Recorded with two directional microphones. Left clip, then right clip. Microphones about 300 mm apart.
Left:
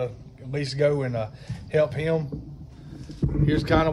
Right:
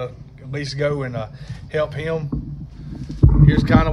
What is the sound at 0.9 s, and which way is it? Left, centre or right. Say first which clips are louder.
Speech: right 1 dB; left.